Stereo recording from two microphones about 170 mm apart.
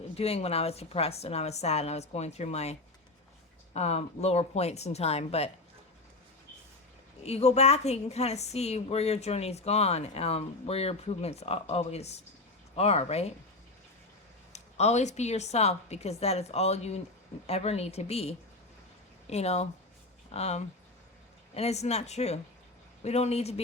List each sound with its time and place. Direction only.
0.2 s a woman's voice: 35° left (ahead or behind)
3.8 s a woman's voice: 40° left (ahead or behind)
7.3 s a woman's voice: 40° left (ahead or behind)
14.5 s a woman's voice: 40° left (ahead or behind)